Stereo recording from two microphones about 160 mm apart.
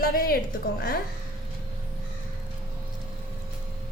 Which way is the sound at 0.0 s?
65° left (ahead or behind).